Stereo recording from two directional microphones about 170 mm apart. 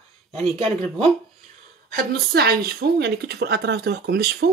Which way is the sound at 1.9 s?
65° right (ahead or behind).